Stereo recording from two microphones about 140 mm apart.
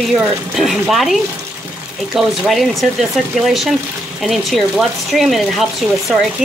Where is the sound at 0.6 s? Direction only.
Centre (ahead or behind).